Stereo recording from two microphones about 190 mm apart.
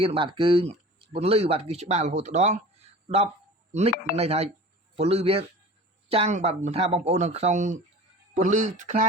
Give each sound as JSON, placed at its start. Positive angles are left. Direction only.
{"t": 0.0, "sound": "speech", "side_deg": -25}
{"t": 3.7, "sound": "speech", "side_deg": -35}